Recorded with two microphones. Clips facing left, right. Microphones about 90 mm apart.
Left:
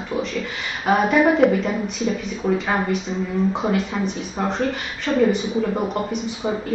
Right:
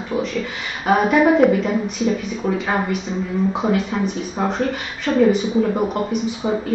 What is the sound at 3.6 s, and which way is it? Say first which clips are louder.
Speech: right 2 dB; 5° right (ahead or behind).